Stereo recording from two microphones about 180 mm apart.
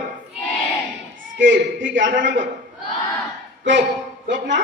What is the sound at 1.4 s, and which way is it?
Speech, 90° right.